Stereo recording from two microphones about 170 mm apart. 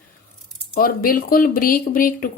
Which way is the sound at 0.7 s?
60° left (ahead or behind).